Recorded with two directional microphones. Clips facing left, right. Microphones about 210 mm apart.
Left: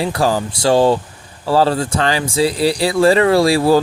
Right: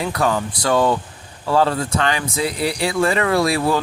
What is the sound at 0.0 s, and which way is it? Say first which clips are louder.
Speech: left 3 dB; 30° left (ahead or behind).